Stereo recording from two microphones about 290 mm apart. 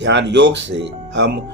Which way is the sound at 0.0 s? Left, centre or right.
Right.